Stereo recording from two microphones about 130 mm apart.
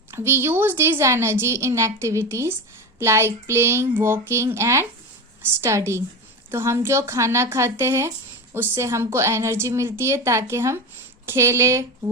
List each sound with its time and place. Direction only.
0.1 s a woman's voice: 20° right (ahead or behind)